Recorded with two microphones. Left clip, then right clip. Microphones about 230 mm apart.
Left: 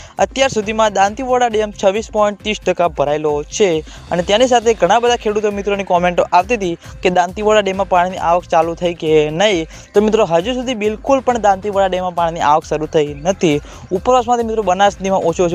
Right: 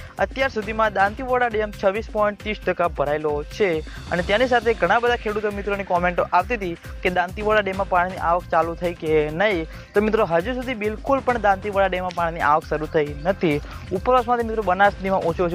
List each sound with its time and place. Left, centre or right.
0.2 s speech: left